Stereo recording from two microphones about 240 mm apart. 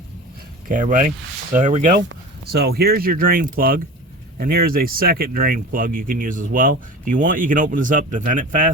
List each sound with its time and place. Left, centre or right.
0.7 s speech: right
2.0 s speech: right